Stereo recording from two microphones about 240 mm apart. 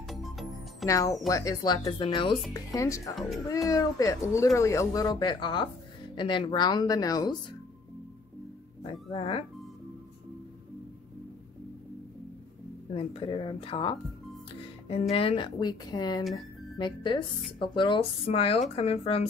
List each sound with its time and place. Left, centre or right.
0.0 s music: centre
0.8 s speech: centre
8.8 s speech: left
12.9 s speech: left